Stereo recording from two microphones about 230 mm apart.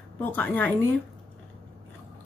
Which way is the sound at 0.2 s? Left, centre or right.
Centre.